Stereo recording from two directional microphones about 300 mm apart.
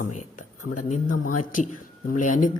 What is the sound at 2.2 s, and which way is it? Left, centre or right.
Speech, left.